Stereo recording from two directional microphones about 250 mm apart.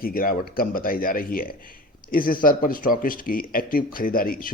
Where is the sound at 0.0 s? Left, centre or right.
Left.